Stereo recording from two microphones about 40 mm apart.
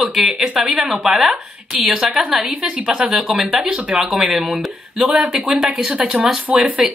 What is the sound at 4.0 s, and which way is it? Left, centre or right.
A woman's voice, centre.